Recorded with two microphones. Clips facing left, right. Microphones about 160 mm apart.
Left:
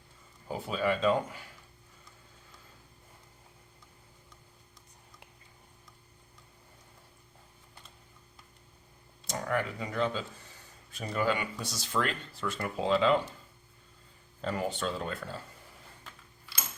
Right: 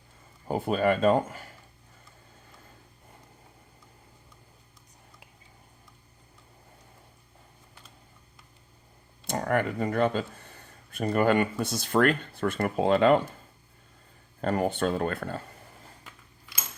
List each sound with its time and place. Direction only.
0.4 s speech: 55° right (ahead or behind)
9.2 s speech: 55° right (ahead or behind)
14.4 s speech: 55° right (ahead or behind)